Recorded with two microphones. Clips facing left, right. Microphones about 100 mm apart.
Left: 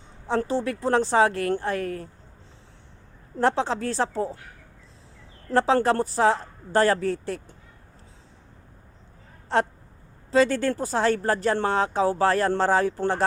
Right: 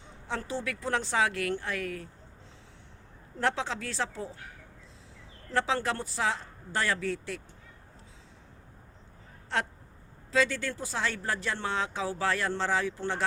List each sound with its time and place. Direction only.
0.3 s a woman's voice: 35° left (ahead or behind)
3.3 s a woman's voice: 35° left (ahead or behind)
5.5 s a woman's voice: 40° left (ahead or behind)
9.5 s a woman's voice: 35° left (ahead or behind)